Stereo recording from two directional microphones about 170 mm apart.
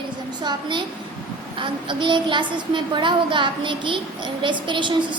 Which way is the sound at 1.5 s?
30° right (ahead or behind).